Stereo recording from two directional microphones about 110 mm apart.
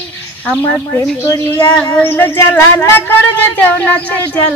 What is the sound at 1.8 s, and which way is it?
Speech, 15° left (ahead or behind).